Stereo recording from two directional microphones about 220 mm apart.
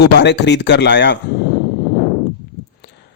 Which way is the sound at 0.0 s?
50° left (ahead or behind).